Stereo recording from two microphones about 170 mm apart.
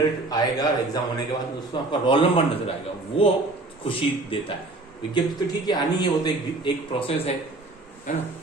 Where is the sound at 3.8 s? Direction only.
35° left (ahead or behind).